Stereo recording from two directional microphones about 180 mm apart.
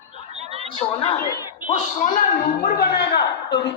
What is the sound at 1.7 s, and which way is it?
A man's voice, 40° left (ahead or behind).